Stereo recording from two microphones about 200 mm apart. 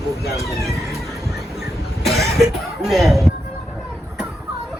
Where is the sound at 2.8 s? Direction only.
Centre (ahead or behind).